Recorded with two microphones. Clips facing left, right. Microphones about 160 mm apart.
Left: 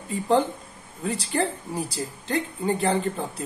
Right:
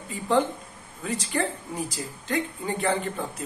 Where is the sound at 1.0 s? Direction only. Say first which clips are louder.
Left 2 dB; 35° left (ahead or behind).